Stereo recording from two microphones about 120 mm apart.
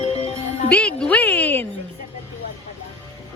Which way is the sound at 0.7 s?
10° left (ahead or behind).